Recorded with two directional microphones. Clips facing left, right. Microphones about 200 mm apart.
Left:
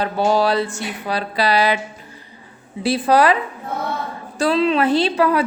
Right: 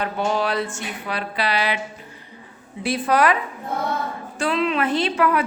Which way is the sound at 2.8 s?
30° left (ahead or behind).